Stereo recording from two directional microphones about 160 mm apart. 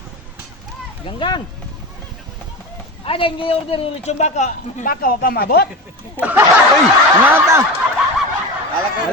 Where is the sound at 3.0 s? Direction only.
35° left (ahead or behind).